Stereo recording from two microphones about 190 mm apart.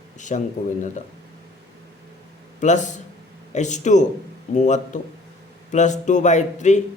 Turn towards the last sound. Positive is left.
turn(degrees=40)  # may be behind; listen again after turning